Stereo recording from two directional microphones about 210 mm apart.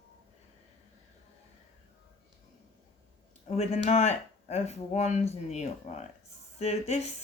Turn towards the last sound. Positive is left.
turn(degrees=30)  # may be behind; listen again after turning